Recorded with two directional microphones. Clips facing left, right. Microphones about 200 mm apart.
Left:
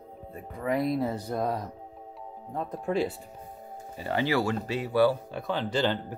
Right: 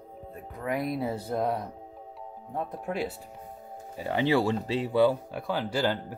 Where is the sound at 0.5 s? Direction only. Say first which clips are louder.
Left 3 dB; centre (ahead or behind).